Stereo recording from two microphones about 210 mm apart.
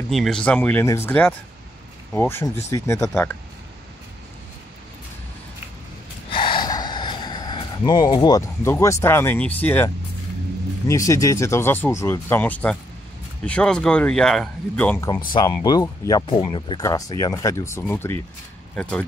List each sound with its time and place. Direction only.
0.1 s speech: centre (ahead or behind)
6.3 s gasp: 25° left (ahead or behind)
10.9 s speech: 15° left (ahead or behind)
15.0 s speech: 20° left (ahead or behind)